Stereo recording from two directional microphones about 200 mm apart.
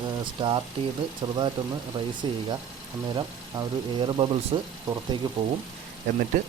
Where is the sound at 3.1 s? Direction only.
20° right (ahead or behind).